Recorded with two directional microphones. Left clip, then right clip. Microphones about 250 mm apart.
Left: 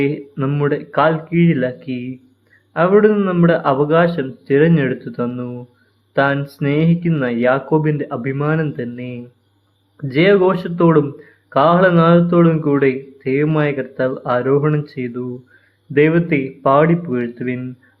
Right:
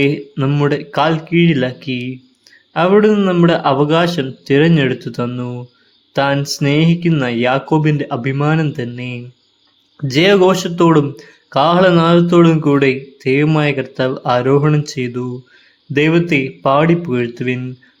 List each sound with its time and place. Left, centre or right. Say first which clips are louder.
0.0 s speech: right 3 dB; right